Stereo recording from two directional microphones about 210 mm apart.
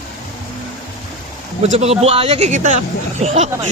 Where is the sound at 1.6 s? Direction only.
30° right (ahead or behind).